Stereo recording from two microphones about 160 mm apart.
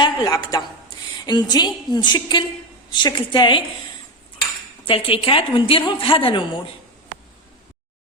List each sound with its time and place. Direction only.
0.0 s a woman's voice: 25° left (ahead or behind)
4.9 s a woman's voice: 35° left (ahead or behind)